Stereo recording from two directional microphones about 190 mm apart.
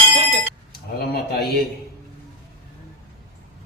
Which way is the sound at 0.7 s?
55° left (ahead or behind).